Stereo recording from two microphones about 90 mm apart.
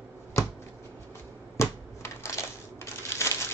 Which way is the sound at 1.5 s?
30° left (ahead or behind).